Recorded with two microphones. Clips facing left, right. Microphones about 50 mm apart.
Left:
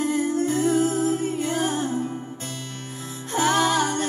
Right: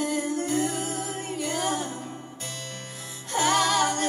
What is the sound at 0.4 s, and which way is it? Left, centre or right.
Music, right.